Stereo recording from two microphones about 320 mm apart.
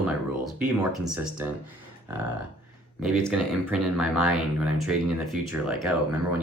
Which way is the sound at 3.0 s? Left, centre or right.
Centre.